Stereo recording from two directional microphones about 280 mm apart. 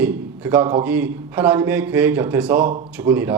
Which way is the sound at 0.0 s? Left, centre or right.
Centre.